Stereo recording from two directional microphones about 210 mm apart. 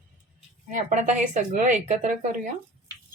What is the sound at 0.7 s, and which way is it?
A woman's voice, 35° right (ahead or behind).